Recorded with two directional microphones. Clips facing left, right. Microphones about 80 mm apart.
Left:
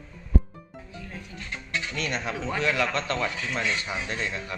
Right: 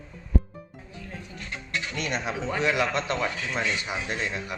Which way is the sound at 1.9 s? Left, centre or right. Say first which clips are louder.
Right 1 dB; centre.